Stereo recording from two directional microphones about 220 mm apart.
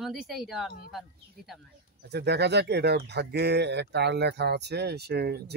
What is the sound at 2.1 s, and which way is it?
Speech, 50° right (ahead or behind).